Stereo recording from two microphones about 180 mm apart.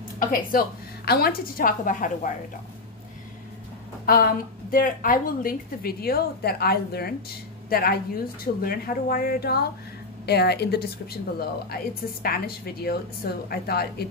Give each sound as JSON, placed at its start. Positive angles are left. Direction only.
{"t": 0.3, "sound": "a woman's voice", "side_deg": 50}
{"t": 4.0, "sound": "a woman's voice", "side_deg": 55}